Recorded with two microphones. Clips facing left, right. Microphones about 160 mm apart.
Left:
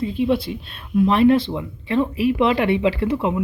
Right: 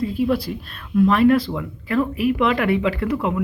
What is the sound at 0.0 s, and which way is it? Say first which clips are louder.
Speech: even; 5° right (ahead or behind).